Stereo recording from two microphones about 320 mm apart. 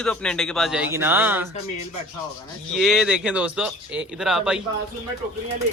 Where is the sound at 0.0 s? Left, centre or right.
Centre.